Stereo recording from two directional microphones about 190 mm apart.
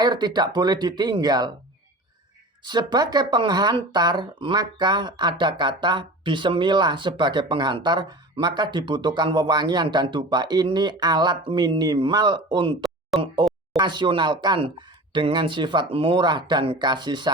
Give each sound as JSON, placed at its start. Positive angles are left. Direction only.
{"t": 0.0, "sound": "speech", "side_deg": -20}
{"t": 2.6, "sound": "speech", "side_deg": -20}
{"t": 12.8, "sound": "a sound", "side_deg": 0}
{"t": 13.7, "sound": "speech", "side_deg": -25}